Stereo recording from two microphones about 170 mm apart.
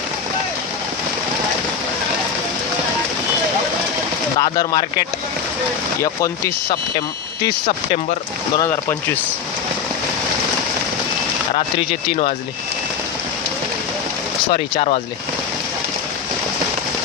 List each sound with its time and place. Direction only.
4.4 s speech: 25° left (ahead or behind)
8.5 s speech: 15° left (ahead or behind)
14.5 s speech: 35° left (ahead or behind)